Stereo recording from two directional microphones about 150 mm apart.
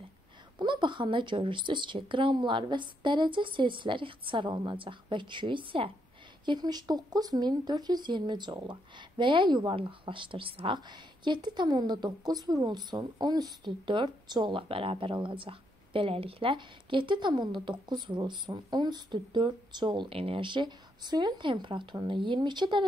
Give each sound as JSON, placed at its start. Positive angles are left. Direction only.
{"t": 0.6, "sound": "speech", "side_deg": -30}